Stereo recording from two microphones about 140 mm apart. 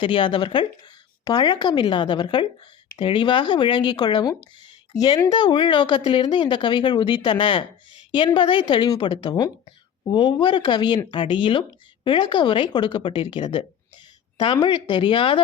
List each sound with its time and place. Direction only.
0.0 s speech: 35° left (ahead or behind)